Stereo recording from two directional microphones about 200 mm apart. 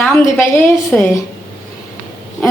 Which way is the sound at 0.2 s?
15° left (ahead or behind).